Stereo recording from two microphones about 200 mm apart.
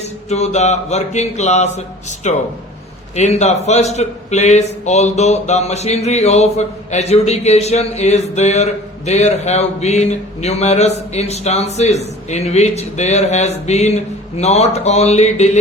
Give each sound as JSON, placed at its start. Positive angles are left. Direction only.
{"t": 0.0, "sound": "a man's voice", "side_deg": 35}